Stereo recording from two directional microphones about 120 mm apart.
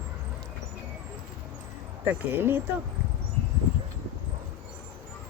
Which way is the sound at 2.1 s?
20° right (ahead or behind).